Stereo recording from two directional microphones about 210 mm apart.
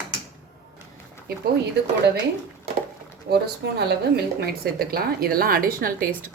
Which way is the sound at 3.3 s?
50° right (ahead or behind).